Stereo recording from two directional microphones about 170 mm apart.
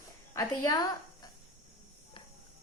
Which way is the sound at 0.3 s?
20° left (ahead or behind).